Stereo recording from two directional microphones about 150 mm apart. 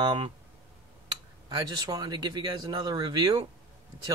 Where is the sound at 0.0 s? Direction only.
30° right (ahead or behind).